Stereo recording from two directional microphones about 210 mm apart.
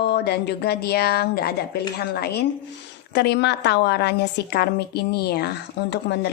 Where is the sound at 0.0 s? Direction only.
50° left (ahead or behind).